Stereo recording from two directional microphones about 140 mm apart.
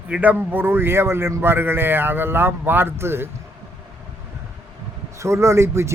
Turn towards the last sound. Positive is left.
turn(degrees=-20)  # may be behind; listen again after turning